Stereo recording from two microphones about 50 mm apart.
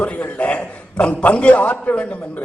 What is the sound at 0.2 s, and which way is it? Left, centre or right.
A man's voice, left.